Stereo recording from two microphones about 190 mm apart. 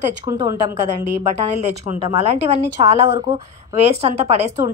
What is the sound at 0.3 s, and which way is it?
Speech, 20° right (ahead or behind).